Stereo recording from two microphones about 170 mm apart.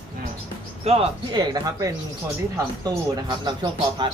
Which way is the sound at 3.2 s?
25° right (ahead or behind).